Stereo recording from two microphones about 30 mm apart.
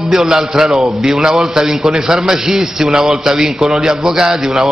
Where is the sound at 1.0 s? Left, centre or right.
Right.